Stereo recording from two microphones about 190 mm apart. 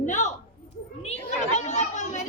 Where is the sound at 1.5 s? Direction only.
40° left (ahead or behind).